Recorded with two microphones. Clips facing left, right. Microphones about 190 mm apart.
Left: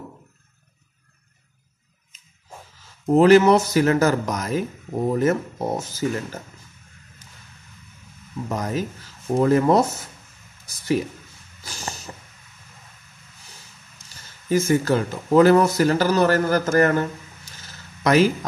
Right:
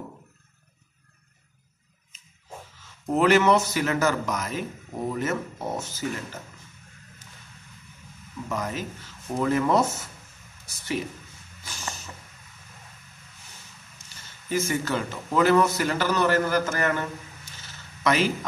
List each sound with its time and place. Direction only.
3.2 s speech: 35° left (ahead or behind)
8.5 s speech: 40° left (ahead or behind)
11.6 s a sound: 35° left (ahead or behind)
14.5 s speech: 40° left (ahead or behind)
18.0 s speech: 40° left (ahead or behind)